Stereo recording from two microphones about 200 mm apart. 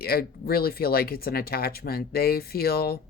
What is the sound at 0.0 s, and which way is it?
Speech, 50° left (ahead or behind).